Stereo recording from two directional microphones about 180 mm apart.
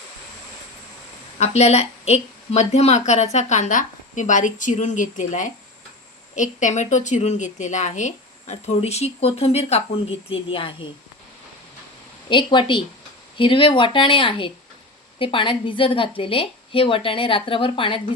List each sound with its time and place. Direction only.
1.4 s speech: 35° left (ahead or behind)
12.3 s a woman's voice: 25° left (ahead or behind)